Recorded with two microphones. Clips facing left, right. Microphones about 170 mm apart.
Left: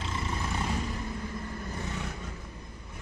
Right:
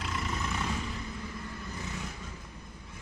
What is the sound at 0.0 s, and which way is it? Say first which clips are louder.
Vehicle: left 1 dB; 25° left (ahead or behind).